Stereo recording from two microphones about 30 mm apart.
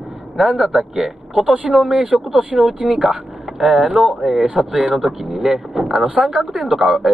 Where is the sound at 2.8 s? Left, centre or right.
Centre.